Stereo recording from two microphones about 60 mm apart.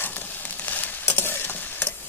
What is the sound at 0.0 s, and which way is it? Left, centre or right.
Stir, left.